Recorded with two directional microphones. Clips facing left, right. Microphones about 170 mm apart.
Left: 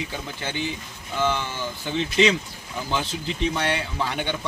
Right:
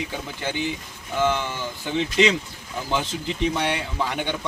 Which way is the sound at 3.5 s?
10° right (ahead or behind).